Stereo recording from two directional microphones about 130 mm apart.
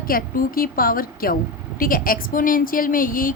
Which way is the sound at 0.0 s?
90° left.